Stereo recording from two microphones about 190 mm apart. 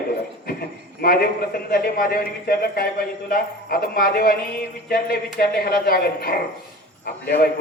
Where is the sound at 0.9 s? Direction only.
55° left (ahead or behind).